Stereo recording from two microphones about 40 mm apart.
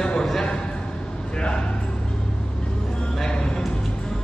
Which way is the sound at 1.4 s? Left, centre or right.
Left.